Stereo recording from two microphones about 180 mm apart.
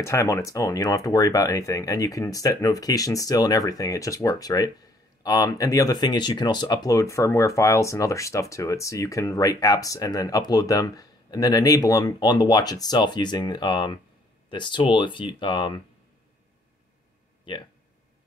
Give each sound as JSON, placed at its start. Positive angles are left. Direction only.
{"t": 0.0, "sound": "speech", "side_deg": 15}
{"t": 17.5, "sound": "speech", "side_deg": 25}